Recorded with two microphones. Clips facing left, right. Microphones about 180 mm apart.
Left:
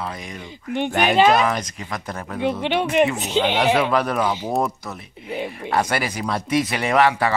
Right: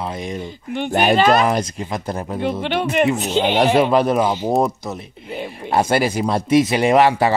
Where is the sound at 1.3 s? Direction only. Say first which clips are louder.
Right 3 dB; 35° right (ahead or behind).